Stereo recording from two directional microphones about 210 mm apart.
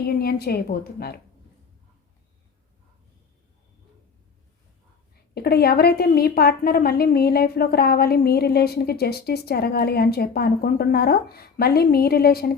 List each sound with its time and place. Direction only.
0.0 s a woman's voice: 50° left (ahead or behind)
5.3 s a woman's voice: 45° left (ahead or behind)